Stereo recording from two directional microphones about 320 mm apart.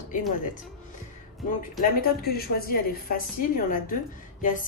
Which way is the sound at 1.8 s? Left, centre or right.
Left.